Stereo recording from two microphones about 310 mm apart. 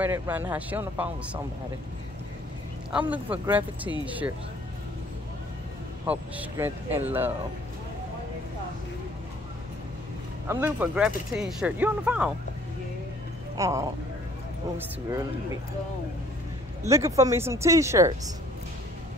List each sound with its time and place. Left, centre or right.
0.0 s speech: centre
2.9 s speech: centre
6.0 s speech: centre
10.5 s speech: centre
13.6 s speech: centre
16.8 s speech: centre